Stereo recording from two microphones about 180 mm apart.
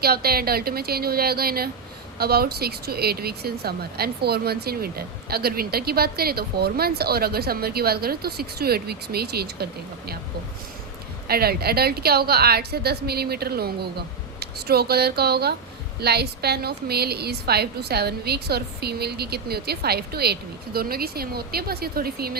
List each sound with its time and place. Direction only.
0.0 s speech: 60° right (ahead or behind)
11.3 s speech: 60° right (ahead or behind)